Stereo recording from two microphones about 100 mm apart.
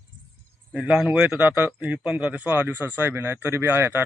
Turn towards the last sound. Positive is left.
turn(degrees=-15)  # may be behind; listen again after turning